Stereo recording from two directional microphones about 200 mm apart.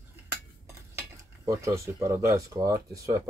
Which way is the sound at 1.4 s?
15° right (ahead or behind).